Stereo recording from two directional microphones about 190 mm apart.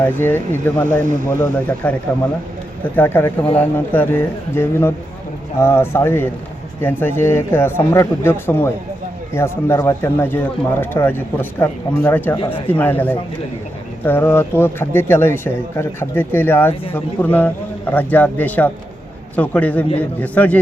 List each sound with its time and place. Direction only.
0.0 s speech: 10° left (ahead or behind)
12.4 s speech: 25° left (ahead or behind)
12.6 s speech: 10° left (ahead or behind)